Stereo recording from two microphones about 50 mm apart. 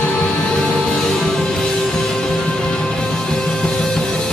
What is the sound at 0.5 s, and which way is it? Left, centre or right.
Music, centre.